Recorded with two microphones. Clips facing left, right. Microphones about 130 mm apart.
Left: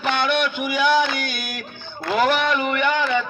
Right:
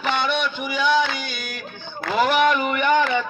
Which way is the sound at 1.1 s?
20° right (ahead or behind).